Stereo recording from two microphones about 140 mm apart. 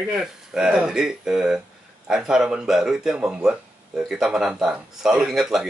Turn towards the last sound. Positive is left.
turn(degrees=-5)  # may be behind; listen again after turning